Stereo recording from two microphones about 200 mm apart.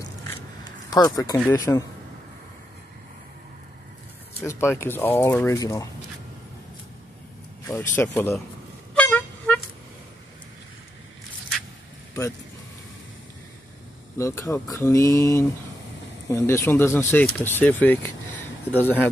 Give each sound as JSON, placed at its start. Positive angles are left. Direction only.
{"t": 0.8, "sound": "speech", "side_deg": 20}
{"t": 4.4, "sound": "speech", "side_deg": 10}
{"t": 7.6, "sound": "speech", "side_deg": 10}
{"t": 8.9, "sound": "music", "side_deg": 10}
{"t": 14.1, "sound": "speech", "side_deg": 15}